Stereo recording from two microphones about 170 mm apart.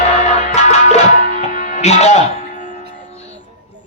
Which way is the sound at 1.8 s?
40° left (ahead or behind).